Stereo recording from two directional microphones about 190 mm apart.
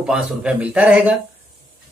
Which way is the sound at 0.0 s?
5° right (ahead or behind).